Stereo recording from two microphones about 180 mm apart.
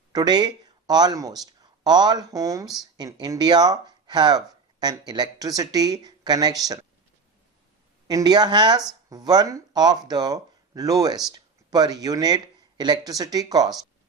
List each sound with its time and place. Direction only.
0.1 s speech: 20° right (ahead or behind)
8.0 s speech: 20° right (ahead or behind)